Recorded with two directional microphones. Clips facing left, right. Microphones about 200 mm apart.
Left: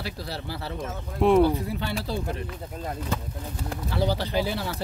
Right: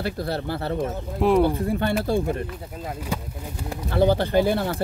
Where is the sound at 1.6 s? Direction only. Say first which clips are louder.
Right 7 dB; 50° right (ahead or behind).